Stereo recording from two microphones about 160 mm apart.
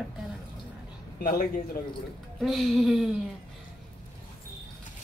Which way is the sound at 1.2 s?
65° left (ahead or behind).